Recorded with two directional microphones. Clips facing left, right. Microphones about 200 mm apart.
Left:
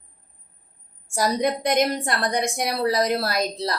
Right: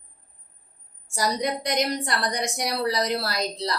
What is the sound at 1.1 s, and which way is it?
A woman's voice, 55° left (ahead or behind).